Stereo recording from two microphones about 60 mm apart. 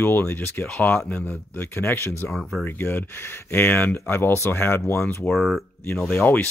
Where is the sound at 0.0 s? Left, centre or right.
Left.